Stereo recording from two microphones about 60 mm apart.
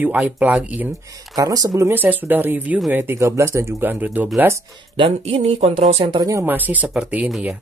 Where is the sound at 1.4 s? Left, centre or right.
Right.